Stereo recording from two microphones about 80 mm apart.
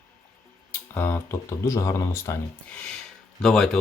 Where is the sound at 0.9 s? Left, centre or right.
Left.